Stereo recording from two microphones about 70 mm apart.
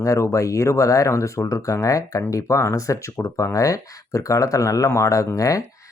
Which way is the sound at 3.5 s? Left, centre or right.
Left.